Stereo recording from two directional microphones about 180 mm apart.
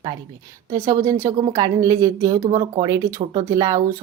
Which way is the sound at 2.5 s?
30° right (ahead or behind).